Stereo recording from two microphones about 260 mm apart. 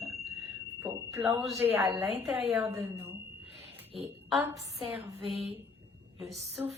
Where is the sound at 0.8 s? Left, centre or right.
Centre.